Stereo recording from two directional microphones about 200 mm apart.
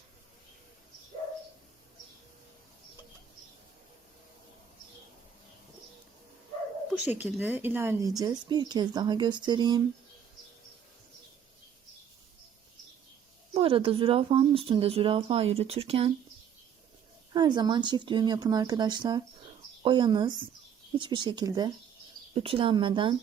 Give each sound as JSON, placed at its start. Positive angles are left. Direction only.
{"t": 7.0, "sound": "speech", "side_deg": -10}
{"t": 13.5, "sound": "speech", "side_deg": -30}
{"t": 17.3, "sound": "speech", "side_deg": -20}